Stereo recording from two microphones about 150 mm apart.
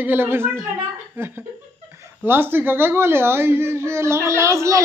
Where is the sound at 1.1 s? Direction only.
15° right (ahead or behind).